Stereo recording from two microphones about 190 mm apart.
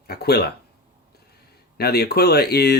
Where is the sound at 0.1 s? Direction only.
60° left (ahead or behind).